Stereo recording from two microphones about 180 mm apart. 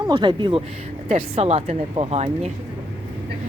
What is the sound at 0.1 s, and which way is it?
Speech, 25° right (ahead or behind).